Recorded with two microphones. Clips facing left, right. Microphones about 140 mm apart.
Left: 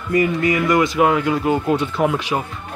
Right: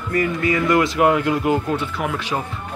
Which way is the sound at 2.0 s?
30° left (ahead or behind).